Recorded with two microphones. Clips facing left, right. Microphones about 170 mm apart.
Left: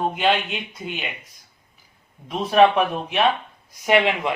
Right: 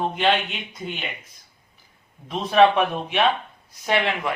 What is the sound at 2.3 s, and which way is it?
Speech, 5° left (ahead or behind).